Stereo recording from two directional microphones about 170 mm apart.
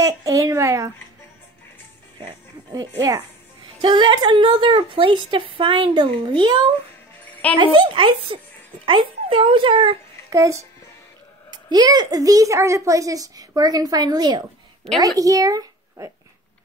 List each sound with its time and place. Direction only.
0.0 s speech: 20° right (ahead or behind)
2.1 s music: 25° right (ahead or behind)
3.0 s a woman's voice: 20° right (ahead or behind)
10.3 s a woman's voice: 15° right (ahead or behind)